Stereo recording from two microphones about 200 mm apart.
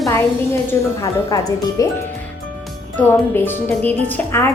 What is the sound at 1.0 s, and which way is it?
Speech, 15° left (ahead or behind).